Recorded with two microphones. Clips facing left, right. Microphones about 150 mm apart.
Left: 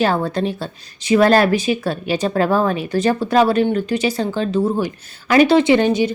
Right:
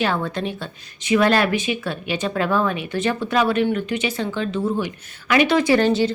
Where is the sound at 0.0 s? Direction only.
40° left (ahead or behind).